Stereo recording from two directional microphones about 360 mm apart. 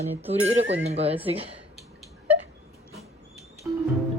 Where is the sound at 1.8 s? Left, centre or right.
Centre.